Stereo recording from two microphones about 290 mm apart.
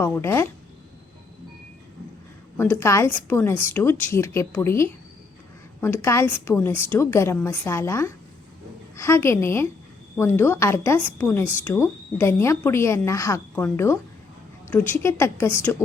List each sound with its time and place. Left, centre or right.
0.0 s speech: centre
2.6 s speech: centre